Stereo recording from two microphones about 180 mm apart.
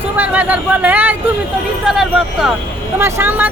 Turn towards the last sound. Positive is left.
turn(degrees=-10)  # may be behind; listen again after turning